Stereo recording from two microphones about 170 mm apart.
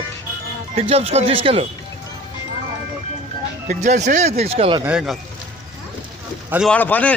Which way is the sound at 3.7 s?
45° right (ahead or behind).